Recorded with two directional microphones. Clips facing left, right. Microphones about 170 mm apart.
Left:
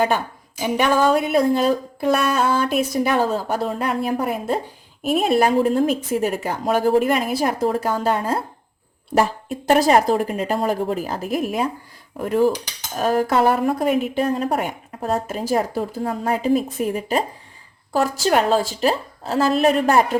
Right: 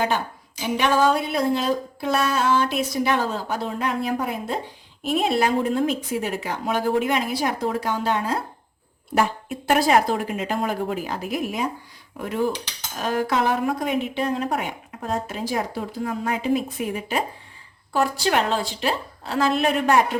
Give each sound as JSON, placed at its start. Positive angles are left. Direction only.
{"t": 0.6, "sound": "speech", "side_deg": 50}